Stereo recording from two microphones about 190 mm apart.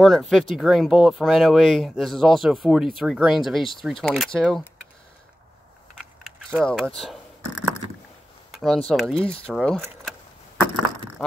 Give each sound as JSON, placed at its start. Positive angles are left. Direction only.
{"t": 0.0, "sound": "speech", "side_deg": 0}
{"t": 6.4, "sound": "speech", "side_deg": 0}
{"t": 8.5, "sound": "a sound", "side_deg": 0}
{"t": 9.1, "sound": "speech", "side_deg": 30}
{"t": 9.5, "sound": "speech", "side_deg": 0}